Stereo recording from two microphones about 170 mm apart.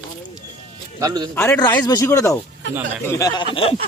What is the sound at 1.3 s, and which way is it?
A man's voice, 10° left (ahead or behind).